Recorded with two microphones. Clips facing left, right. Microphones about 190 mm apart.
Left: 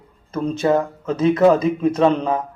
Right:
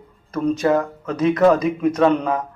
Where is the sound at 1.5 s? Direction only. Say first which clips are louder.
Left 1 dB; 30° left (ahead or behind).